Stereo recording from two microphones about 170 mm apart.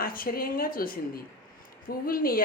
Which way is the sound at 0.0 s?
60° left (ahead or behind).